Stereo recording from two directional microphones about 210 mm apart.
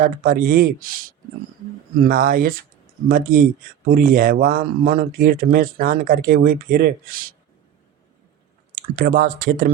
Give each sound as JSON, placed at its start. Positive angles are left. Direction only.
{"t": 0.0, "sound": "speech", "side_deg": -40}
{"t": 9.0, "sound": "speech", "side_deg": -45}